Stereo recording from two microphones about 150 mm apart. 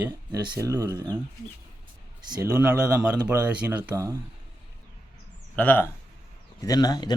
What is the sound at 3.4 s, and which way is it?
Speech, 10° right (ahead or behind).